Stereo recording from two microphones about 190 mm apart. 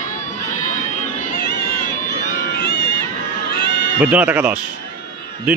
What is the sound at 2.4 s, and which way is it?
Run, 60° left (ahead or behind).